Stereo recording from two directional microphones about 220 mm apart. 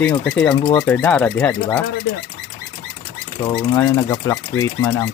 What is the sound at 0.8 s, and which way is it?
Speech, 5° left (ahead or behind).